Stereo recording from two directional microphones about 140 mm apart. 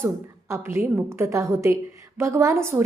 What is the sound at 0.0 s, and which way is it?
A woman's voice, 20° right (ahead or behind).